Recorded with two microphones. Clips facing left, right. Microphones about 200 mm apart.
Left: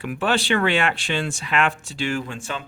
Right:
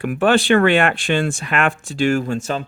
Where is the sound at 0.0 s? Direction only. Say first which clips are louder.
Right 7 dB; 50° right (ahead or behind).